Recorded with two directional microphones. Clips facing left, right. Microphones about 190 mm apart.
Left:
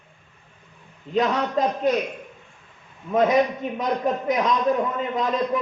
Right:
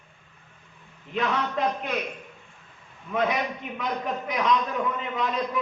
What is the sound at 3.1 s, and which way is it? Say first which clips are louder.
Speech: left 6 dB; 45° left (ahead or behind).